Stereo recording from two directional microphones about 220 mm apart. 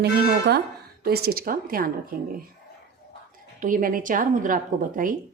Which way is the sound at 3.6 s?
40° right (ahead or behind).